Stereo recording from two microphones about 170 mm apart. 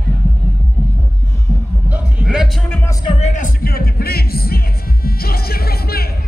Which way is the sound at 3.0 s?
40° left (ahead or behind).